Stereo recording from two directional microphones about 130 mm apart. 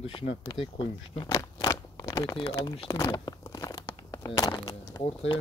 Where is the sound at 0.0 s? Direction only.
45° left (ahead or behind).